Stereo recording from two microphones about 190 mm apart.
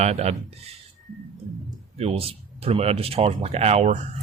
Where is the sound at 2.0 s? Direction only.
30° right (ahead or behind).